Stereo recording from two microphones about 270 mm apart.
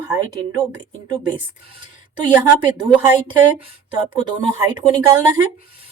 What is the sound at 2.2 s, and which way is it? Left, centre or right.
Speech, centre.